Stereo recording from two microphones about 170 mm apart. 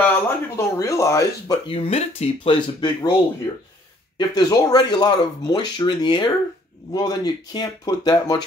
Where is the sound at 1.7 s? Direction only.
35° left (ahead or behind).